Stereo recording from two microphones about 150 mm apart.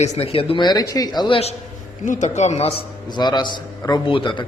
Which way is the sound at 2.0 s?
55° left (ahead or behind).